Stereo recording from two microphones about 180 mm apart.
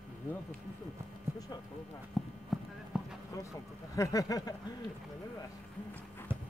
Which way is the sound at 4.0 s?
20° left (ahead or behind).